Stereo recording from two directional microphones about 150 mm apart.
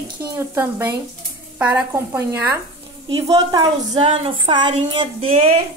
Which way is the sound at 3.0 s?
30° right (ahead or behind).